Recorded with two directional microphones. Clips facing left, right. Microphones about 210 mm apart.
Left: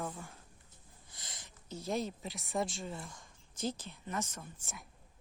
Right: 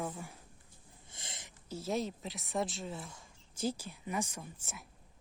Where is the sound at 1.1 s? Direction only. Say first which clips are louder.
Right 3 dB; 25° right (ahead or behind).